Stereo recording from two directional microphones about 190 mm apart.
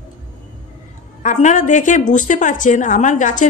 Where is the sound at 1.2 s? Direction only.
40° left (ahead or behind).